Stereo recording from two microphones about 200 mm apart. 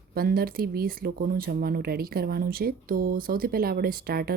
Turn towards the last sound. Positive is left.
turn(degrees=-50)  # may be behind; listen again after turning